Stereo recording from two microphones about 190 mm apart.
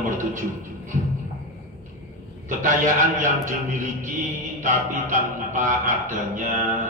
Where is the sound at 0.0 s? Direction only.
45° right (ahead or behind).